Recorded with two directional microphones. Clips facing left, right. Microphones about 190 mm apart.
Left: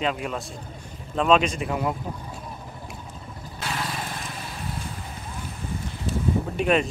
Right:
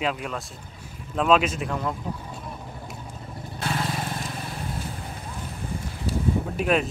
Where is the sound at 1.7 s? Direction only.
10° left (ahead or behind).